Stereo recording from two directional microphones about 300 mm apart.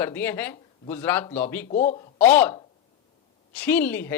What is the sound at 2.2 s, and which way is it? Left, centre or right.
Speech, centre.